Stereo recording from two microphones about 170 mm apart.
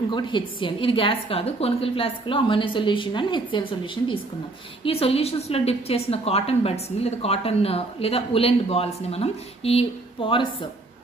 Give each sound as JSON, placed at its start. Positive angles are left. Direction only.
{"t": 0.1, "sound": "a woman's voice", "side_deg": 25}